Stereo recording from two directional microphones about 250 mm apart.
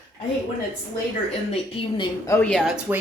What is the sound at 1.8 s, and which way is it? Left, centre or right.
A woman's voice, centre.